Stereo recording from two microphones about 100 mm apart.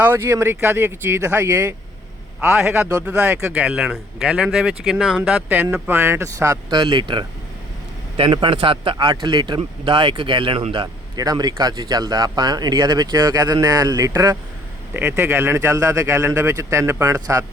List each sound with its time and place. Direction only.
0.0 s speech: 20° right (ahead or behind)
2.6 s a man's voice: 5° right (ahead or behind)
2.9 s speech: 25° right (ahead or behind)
3.7 s speech: 5° right (ahead or behind); by 6.6 s 30° right (ahead or behind)
6.7 s speech: 45° right (ahead or behind)
11.2 s a man's voice: 40° right (ahead or behind)
14.9 s speech: 10° right (ahead or behind)
15.2 s a man's voice: 25° right (ahead or behind)